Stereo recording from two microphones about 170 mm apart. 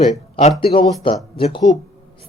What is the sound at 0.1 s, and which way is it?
A man's voice, 40° left (ahead or behind).